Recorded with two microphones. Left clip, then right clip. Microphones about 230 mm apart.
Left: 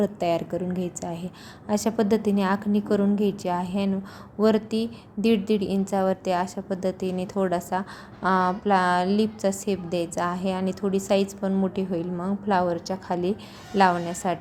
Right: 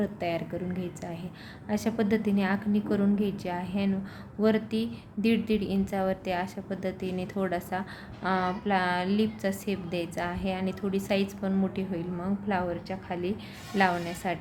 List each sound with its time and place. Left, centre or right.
0.0 s a woman's voice: centre